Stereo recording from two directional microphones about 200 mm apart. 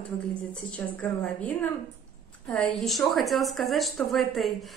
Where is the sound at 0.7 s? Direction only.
5° left (ahead or behind).